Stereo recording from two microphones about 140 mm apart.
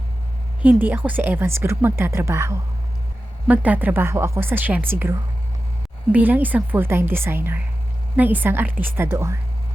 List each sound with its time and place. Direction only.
0.6 s a woman's voice: 10° right (ahead or behind)